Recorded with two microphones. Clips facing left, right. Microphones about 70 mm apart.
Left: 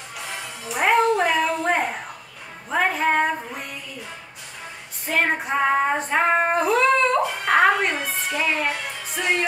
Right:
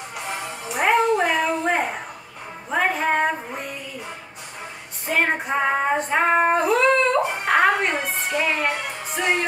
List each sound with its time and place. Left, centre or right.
0.3 s music: right
0.7 s a sound: centre
2.7 s music: centre
5.0 s female singing: centre
7.4 s music: centre